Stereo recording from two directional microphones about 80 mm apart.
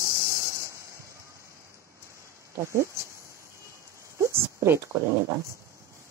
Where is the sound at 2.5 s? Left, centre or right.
Right.